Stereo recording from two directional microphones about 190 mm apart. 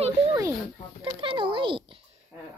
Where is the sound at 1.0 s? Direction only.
25° right (ahead or behind).